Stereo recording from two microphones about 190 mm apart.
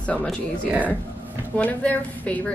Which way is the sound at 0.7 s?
10° right (ahead or behind).